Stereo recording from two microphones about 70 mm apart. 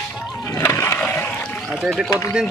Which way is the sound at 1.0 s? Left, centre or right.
Left.